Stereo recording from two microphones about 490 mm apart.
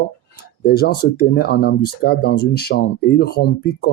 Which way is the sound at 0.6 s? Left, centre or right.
Centre.